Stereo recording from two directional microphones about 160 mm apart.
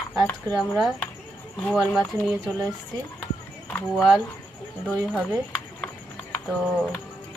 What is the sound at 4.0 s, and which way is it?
Speech, 5° right (ahead or behind).